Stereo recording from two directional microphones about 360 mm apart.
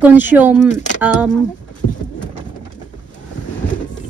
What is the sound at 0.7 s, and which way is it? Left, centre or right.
Music, centre.